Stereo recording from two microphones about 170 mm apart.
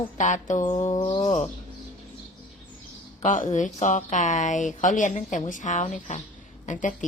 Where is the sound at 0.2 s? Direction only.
45° left (ahead or behind).